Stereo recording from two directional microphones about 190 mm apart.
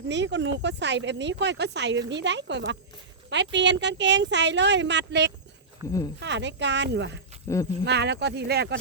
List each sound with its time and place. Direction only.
0.1 s speech: 70° right (ahead or behind)
5.8 s speech: 20° right (ahead or behind)
6.1 s speech: 65° right (ahead or behind)
7.4 s speech: 15° left (ahead or behind)
7.9 s speech: 65° right (ahead or behind)